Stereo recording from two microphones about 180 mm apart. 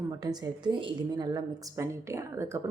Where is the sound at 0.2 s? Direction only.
20° right (ahead or behind).